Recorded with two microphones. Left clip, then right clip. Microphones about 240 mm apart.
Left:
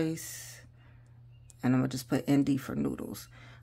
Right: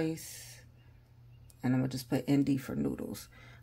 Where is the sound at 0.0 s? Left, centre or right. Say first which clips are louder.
Left 2 dB; left.